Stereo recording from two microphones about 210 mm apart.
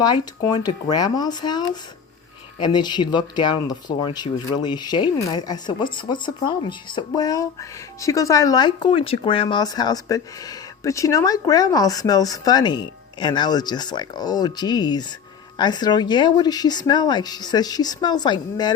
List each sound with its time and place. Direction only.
0.0 s speech: 20° left (ahead or behind)